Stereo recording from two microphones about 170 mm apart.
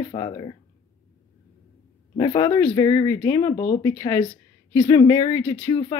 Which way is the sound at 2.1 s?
25° left (ahead or behind).